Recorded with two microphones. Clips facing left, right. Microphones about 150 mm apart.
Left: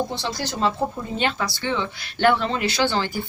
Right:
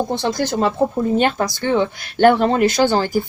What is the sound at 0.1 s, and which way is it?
Speech, 50° right (ahead or behind).